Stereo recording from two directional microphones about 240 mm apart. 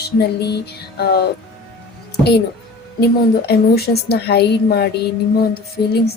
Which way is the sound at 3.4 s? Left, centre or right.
Left.